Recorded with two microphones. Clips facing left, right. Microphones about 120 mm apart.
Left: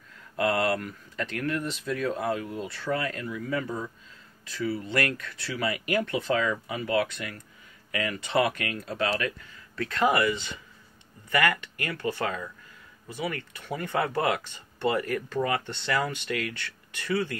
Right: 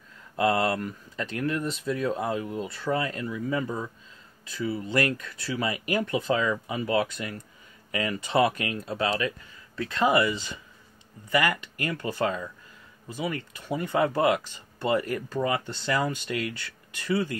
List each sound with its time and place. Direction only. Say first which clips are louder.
0.4 s speech: right 1 dB; 25° right (ahead or behind)
11.3 s speech: even; 20° right (ahead or behind)
13.2 s speech: right 1 dB; 20° right (ahead or behind)